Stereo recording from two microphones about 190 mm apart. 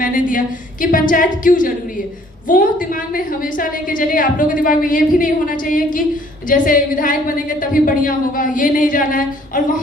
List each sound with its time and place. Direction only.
0.0 s a woman's voice: 45° left (ahead or behind)